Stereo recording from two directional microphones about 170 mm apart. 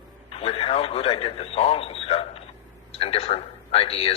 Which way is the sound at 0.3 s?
35° left (ahead or behind).